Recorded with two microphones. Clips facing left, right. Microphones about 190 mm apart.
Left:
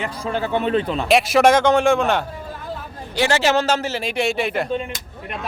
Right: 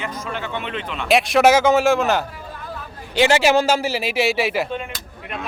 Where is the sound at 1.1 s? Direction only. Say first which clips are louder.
Even; centre (ahead or behind).